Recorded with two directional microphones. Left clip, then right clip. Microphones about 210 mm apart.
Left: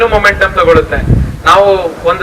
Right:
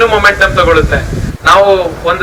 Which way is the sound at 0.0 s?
25° right (ahead or behind).